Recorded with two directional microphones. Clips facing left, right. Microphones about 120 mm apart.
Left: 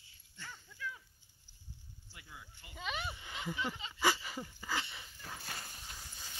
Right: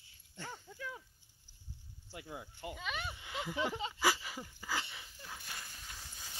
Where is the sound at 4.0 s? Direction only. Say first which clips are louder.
Left 2 dB; 5° right (ahead or behind).